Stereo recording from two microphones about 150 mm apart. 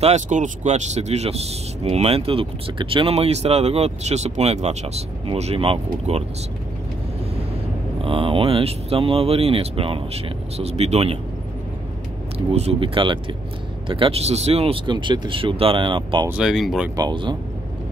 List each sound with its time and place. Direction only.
0.0 s speech: 55° right (ahead or behind)
8.0 s speech: 35° right (ahead or behind)
12.4 s speech: 40° right (ahead or behind)
14.9 s speech: 30° right (ahead or behind)
16.3 s speech: 5° right (ahead or behind)
16.9 s speech: 30° right (ahead or behind)